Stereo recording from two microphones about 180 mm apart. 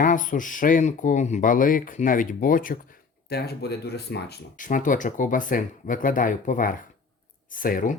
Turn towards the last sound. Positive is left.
turn(degrees=50)  # may be behind; listen again after turning